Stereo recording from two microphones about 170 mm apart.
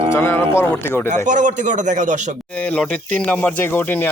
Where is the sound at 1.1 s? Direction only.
45° right (ahead or behind).